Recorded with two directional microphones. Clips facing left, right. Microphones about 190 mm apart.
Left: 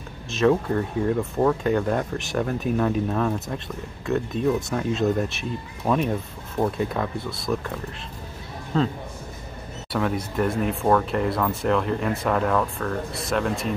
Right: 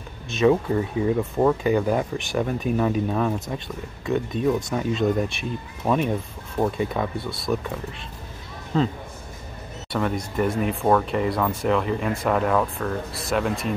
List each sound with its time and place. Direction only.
0.3 s speech: centre (ahead or behind)
9.9 s speech: centre (ahead or behind)